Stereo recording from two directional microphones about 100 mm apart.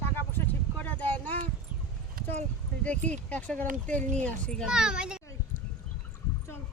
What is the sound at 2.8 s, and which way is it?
Speech, 10° left (ahead or behind).